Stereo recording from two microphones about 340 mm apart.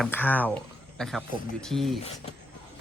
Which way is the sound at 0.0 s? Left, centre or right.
Centre.